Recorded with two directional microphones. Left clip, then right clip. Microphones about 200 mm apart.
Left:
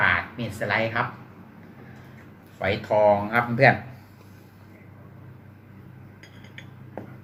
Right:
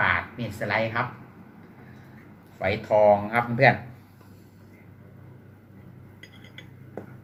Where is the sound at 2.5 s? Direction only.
Centre (ahead or behind).